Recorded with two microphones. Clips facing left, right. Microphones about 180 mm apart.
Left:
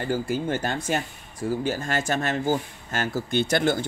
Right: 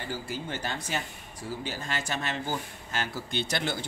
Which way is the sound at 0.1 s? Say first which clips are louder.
Left 10 dB; 50° left (ahead or behind).